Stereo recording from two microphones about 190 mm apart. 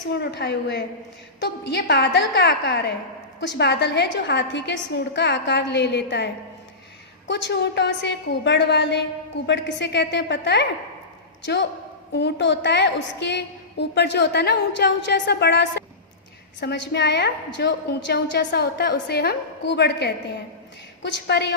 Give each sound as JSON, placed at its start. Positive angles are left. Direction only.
{"t": 0.1, "sound": "a woman's voice", "side_deg": 60}